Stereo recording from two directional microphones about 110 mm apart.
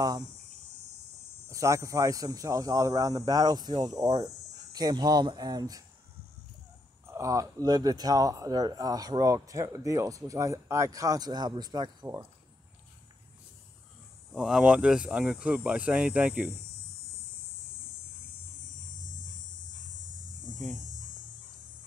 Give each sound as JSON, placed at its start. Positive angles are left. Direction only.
{"t": 1.5, "sound": "speech", "side_deg": -30}
{"t": 7.1, "sound": "speech", "side_deg": -30}
{"t": 14.3, "sound": "speech", "side_deg": -5}